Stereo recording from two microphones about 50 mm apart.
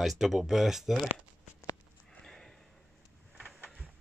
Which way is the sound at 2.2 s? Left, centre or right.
Centre.